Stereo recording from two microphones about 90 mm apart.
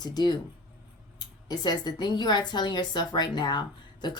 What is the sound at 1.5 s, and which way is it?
Speech, 50° left (ahead or behind).